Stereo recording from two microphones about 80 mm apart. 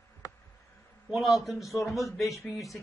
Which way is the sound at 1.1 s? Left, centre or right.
Centre.